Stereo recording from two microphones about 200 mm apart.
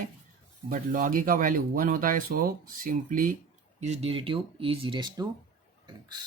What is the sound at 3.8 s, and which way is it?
Speech, 30° right (ahead or behind).